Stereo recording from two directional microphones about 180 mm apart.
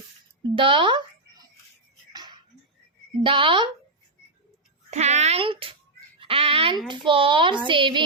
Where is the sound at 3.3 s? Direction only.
30° right (ahead or behind).